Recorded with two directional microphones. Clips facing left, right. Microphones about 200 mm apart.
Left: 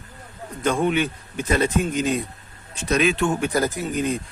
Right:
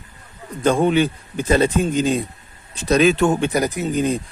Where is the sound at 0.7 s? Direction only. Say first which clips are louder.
Right 5 dB; 35° right (ahead or behind).